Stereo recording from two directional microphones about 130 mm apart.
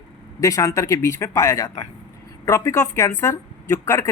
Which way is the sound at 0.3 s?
25° left (ahead or behind).